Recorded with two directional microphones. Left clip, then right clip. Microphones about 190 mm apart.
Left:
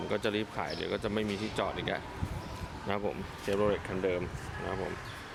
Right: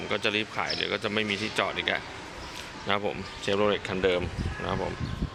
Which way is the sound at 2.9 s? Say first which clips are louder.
Right 6 dB; centre (ahead or behind).